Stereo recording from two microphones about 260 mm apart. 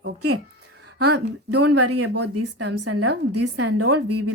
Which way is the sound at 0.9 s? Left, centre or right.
Right.